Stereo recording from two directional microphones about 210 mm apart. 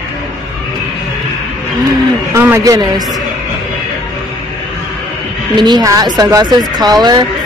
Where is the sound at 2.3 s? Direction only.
15° right (ahead or behind).